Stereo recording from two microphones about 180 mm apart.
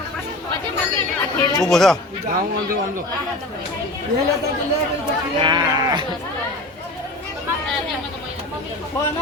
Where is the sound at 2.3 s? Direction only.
50° right (ahead or behind).